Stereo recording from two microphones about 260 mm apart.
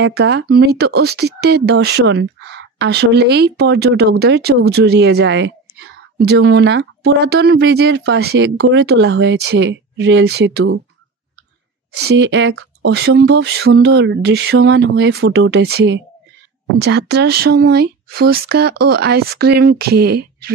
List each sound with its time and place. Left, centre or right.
0.0 s speech: right
11.9 s speech: right